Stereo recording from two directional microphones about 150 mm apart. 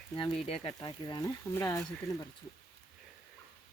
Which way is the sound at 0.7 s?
25° left (ahead or behind).